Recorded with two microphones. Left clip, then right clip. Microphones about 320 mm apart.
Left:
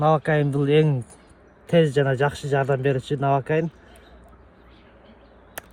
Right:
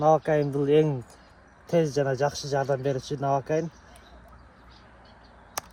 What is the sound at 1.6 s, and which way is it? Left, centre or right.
Speech, left.